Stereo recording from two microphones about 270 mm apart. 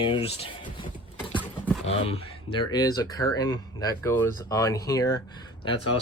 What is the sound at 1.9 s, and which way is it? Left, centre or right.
Speech, left.